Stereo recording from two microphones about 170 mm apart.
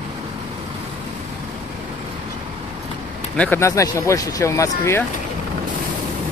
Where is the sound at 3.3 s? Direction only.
10° left (ahead or behind).